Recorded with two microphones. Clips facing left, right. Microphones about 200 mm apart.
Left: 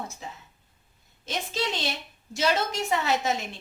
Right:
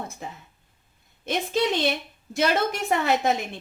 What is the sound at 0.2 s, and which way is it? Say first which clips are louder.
A woman's voice: right 3 dB; 55° right (ahead or behind).